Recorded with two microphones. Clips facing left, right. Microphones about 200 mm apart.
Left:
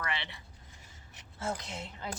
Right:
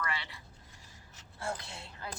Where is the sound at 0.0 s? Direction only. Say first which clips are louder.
Left 1 dB; 20° left (ahead or behind).